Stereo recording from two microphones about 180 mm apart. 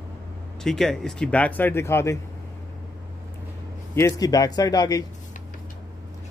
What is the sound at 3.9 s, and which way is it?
Speech, 20° left (ahead or behind).